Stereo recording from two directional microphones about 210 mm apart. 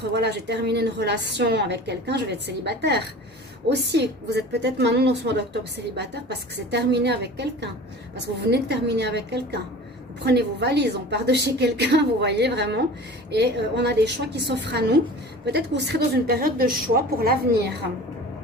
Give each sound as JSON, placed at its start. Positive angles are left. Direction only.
{"t": 0.1, "sound": "a woman's voice", "side_deg": -55}